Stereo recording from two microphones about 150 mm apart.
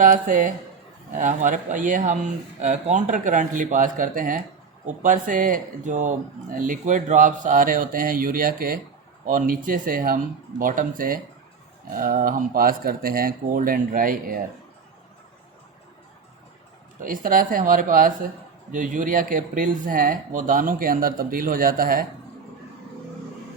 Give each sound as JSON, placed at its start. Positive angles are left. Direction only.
{"t": 0.0, "sound": "speech", "side_deg": -65}
{"t": 9.2, "sound": "speech", "side_deg": -65}
{"t": 17.0, "sound": "speech", "side_deg": -65}